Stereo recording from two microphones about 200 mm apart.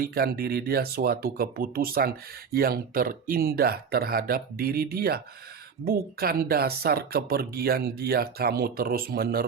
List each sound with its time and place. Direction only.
0.0 s speech: 50° right (ahead or behind)